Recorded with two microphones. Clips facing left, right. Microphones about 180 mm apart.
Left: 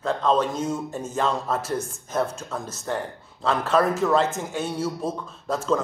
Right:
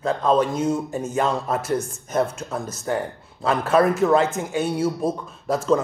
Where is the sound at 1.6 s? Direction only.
Centre (ahead or behind).